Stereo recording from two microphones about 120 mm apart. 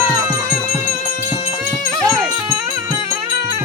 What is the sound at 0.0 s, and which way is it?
Music, 30° right (ahead or behind).